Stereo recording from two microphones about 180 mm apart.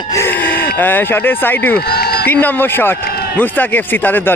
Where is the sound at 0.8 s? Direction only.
10° left (ahead or behind).